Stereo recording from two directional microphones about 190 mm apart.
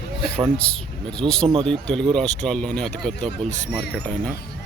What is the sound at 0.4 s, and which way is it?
Speech, 5° left (ahead or behind).